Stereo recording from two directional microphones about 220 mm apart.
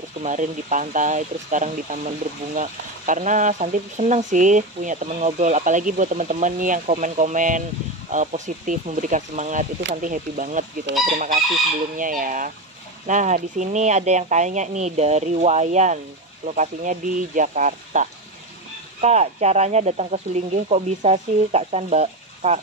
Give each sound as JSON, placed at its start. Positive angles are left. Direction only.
{"t": 0.2, "sound": "speech", "side_deg": -35}
{"t": 10.9, "sound": "chicken", "side_deg": -55}
{"t": 12.0, "sound": "speech", "side_deg": -40}